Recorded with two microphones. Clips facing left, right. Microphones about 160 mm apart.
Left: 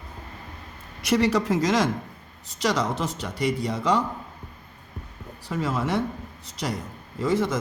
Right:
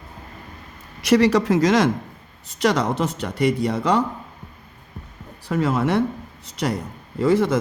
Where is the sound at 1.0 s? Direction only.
80° right.